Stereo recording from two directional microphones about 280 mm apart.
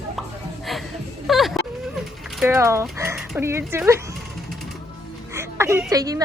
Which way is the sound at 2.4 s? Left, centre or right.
Centre.